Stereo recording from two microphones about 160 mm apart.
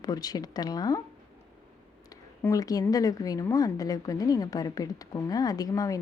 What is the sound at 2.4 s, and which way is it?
A woman's voice, 20° left (ahead or behind).